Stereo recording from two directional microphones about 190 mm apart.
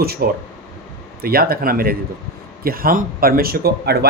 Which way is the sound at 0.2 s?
50° right (ahead or behind).